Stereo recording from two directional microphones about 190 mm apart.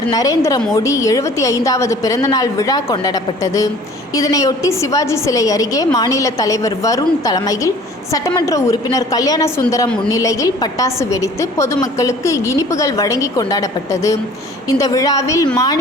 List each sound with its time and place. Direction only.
0.1 s a woman's voice: 20° left (ahead or behind)